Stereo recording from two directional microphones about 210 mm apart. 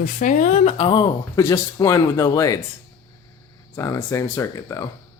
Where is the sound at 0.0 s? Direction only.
40° left (ahead or behind); by 2.6 s 15° left (ahead or behind).